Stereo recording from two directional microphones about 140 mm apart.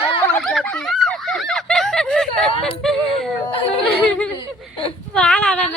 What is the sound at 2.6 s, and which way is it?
Yodeling, 5° left (ahead or behind).